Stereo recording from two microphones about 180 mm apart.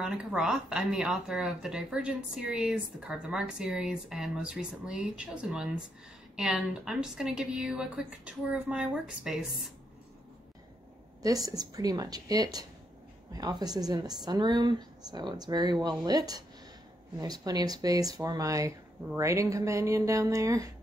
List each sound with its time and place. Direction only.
0.0 s speech: 5° right (ahead or behind)
11.2 s speech: 20° right (ahead or behind)